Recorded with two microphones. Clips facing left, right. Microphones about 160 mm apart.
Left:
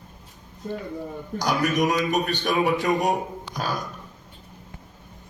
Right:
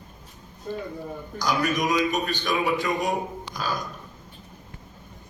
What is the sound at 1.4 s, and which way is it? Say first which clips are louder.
A man's voice: left 2 dB; 65° left (ahead or behind).